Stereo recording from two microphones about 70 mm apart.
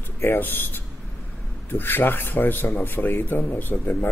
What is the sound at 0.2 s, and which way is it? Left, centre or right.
Speech, left.